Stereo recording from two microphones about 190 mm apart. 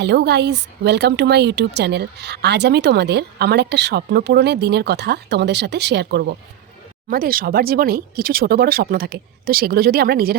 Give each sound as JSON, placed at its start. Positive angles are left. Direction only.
{"t": 0.0, "sound": "a woman's voice", "side_deg": -60}
{"t": 7.1, "sound": "speech", "side_deg": -50}